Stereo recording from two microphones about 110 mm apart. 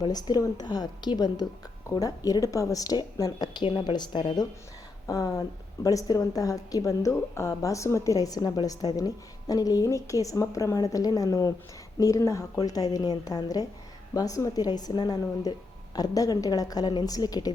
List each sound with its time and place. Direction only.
0.0 s a woman's voice: 35° left (ahead or behind)
5.0 s a woman's voice: 35° left (ahead or behind)